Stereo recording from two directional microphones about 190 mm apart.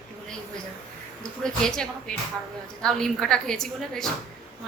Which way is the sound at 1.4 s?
5° left (ahead or behind).